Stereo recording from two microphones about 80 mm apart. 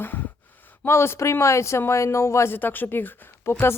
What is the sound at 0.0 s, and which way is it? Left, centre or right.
Gasp, left.